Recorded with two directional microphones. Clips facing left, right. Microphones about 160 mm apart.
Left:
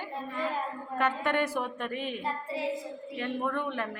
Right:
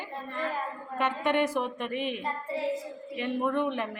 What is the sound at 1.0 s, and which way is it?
Speech, 10° right (ahead or behind).